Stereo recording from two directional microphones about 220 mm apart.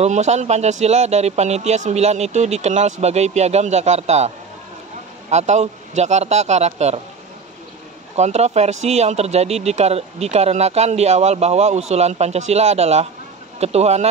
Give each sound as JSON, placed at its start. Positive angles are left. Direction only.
{"t": 0.0, "sound": "speech", "side_deg": -30}
{"t": 5.3, "sound": "speech", "side_deg": -30}
{"t": 8.2, "sound": "speech", "side_deg": -30}